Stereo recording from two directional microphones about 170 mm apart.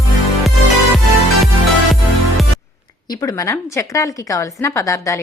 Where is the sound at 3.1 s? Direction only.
20° left (ahead or behind).